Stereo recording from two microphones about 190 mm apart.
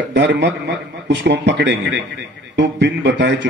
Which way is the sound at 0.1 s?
65° right (ahead or behind).